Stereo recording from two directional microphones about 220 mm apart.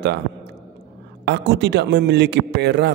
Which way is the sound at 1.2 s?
50° right (ahead or behind).